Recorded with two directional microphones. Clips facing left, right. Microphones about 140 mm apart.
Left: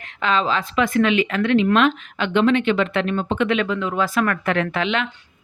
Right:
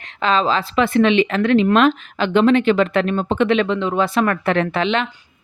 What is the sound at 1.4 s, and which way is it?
A woman's voice, 40° right (ahead or behind).